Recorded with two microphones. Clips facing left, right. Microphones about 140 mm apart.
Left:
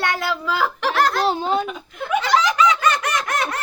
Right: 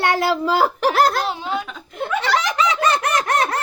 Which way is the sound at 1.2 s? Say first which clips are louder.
Left 4 dB; 35° left (ahead or behind).